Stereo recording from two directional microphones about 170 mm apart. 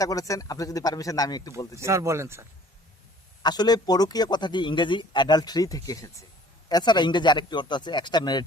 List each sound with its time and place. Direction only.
0.0 s speech: 20° left (ahead or behind)
1.8 s speech: 15° right (ahead or behind)
3.4 s speech: 25° left (ahead or behind)